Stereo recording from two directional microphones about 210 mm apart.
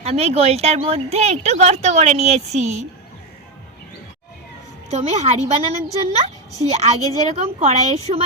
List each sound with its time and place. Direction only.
0.0 s speech: 30° right (ahead or behind)
4.9 s speech: 30° right (ahead or behind)